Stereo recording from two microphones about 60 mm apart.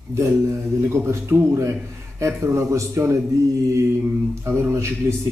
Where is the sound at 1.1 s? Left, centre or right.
Right.